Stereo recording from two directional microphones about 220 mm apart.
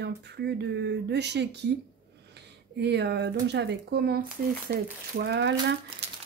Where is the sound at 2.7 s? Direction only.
50° right (ahead or behind).